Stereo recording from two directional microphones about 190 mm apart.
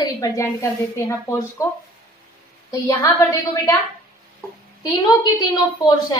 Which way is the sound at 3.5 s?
20° left (ahead or behind).